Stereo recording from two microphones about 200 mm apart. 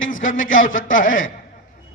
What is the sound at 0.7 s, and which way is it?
Speech, 75° left (ahead or behind).